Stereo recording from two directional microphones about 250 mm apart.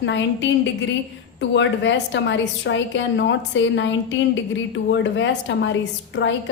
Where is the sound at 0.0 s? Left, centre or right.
Left.